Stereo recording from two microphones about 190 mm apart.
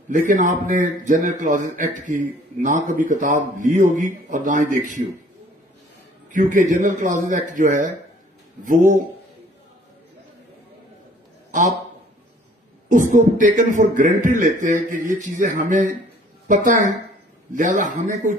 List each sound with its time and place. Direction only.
0.1 s speech: 45° right (ahead or behind)
6.3 s a man's voice: 40° right (ahead or behind)
12.8 s a man's voice: 40° right (ahead or behind)